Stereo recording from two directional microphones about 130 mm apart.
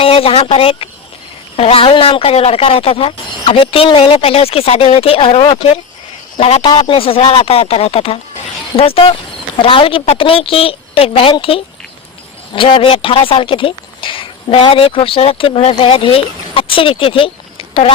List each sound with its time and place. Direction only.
0.0 s speech: 45° left (ahead or behind)